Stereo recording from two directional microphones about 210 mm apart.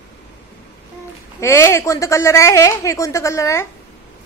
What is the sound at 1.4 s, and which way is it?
Speech, 15° left (ahead or behind).